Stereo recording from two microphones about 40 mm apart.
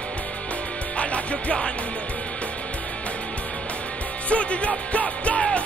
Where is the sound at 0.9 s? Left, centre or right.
Left.